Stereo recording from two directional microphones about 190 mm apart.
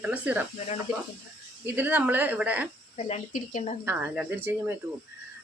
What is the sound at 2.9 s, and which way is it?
Speech, 35° left (ahead or behind).